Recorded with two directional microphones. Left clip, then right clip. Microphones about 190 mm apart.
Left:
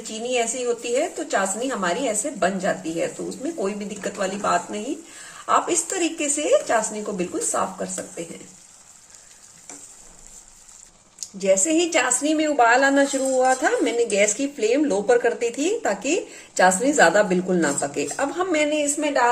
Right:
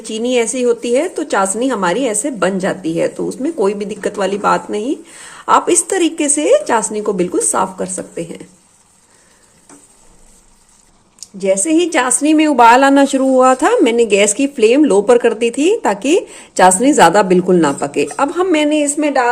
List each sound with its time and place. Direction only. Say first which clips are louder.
0.1 s a woman's voice: right 9 dB; 50° right (ahead or behind)
11.2 s a woman's voice: right 4 dB; 20° right (ahead or behind); by 19.2 s 45° right (ahead or behind)